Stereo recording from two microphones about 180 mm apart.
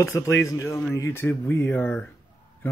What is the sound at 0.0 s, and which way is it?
Speech, 15° left (ahead or behind).